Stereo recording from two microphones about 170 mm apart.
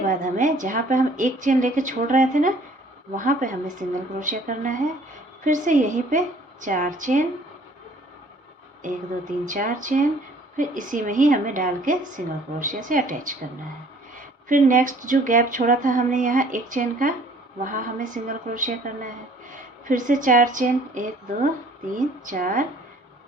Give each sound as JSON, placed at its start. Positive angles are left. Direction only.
{"t": 0.1, "sound": "speech", "side_deg": -50}
{"t": 8.8, "sound": "speech", "side_deg": -50}
{"t": 14.4, "sound": "speech", "side_deg": -50}